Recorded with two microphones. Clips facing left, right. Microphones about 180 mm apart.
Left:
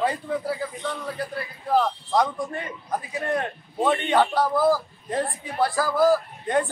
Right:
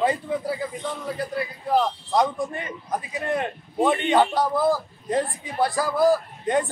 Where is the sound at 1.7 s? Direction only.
20° right (ahead or behind).